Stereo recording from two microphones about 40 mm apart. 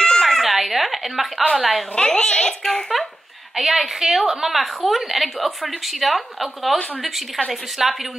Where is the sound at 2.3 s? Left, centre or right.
Centre.